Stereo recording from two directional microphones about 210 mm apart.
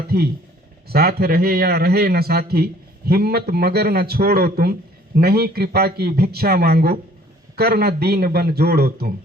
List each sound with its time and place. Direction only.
0.1 s a man's voice: 50° right (ahead or behind)